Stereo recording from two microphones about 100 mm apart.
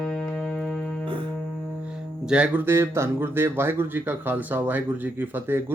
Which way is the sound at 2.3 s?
10° right (ahead or behind).